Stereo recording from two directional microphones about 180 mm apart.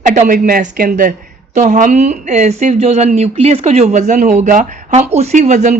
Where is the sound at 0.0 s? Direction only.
45° right (ahead or behind).